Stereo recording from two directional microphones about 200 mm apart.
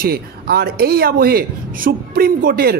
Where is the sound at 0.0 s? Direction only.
50° right (ahead or behind).